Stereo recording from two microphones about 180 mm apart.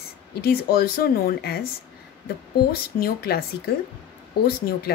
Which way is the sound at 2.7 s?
55° left (ahead or behind).